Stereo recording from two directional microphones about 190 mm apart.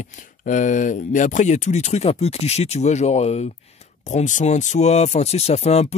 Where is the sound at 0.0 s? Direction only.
40° left (ahead or behind).